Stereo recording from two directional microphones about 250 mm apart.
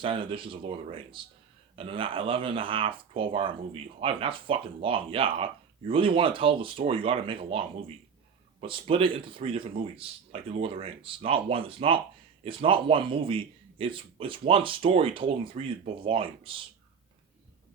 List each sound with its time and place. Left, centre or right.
0.0 s a man's voice: right